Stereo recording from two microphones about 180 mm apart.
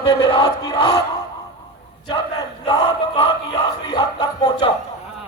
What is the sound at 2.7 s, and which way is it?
Speech, 30° left (ahead or behind).